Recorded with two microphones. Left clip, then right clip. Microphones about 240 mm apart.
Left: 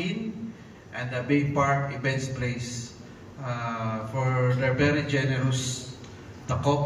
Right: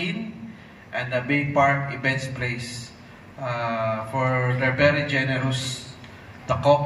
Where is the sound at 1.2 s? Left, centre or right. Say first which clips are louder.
Right 4 dB; right.